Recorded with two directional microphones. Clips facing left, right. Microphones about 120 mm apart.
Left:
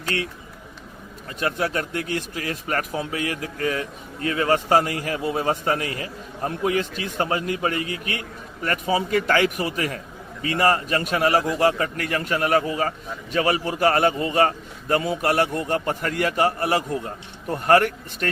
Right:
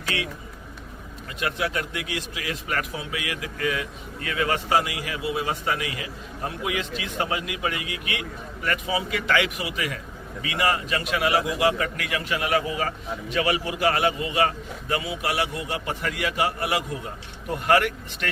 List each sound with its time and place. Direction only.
0.1 s a man's voice: 40° left (ahead or behind)
1.4 s a man's voice: 40° left (ahead or behind)